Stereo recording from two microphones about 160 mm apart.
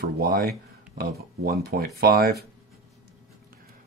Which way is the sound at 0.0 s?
70° right (ahead or behind).